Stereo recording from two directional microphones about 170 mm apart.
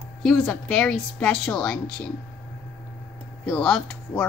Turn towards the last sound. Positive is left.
turn(degrees=5)  # may be behind; listen again after turning